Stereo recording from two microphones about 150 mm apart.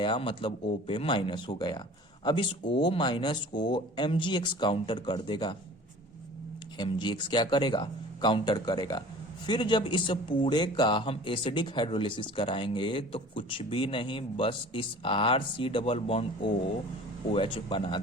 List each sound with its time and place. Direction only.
0.0 s speech: 35° left (ahead or behind)
6.7 s speech: 30° left (ahead or behind)